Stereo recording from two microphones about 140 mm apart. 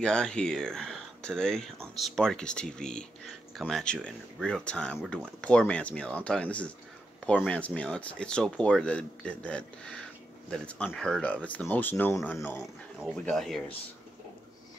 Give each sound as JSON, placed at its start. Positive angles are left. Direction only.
{"t": 0.0, "sound": "speech", "side_deg": 5}
{"t": 13.1, "sound": "speech", "side_deg": 5}